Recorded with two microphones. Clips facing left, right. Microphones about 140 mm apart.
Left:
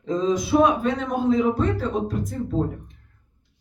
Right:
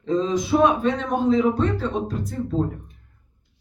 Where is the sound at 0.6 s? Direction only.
10° left (ahead or behind).